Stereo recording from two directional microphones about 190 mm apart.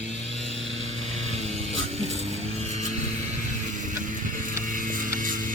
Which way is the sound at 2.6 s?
35° right (ahead or behind).